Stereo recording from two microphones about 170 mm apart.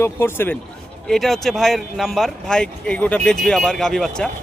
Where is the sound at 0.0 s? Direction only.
15° left (ahead or behind).